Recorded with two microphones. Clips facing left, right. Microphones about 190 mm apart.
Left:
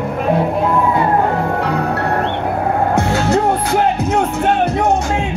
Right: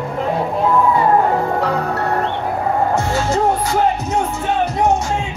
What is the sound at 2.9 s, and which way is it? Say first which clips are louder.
Music: left 3 dB; 65° left (ahead or behind).